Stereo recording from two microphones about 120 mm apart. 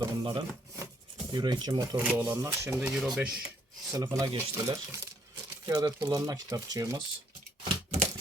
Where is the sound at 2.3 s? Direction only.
20° right (ahead or behind).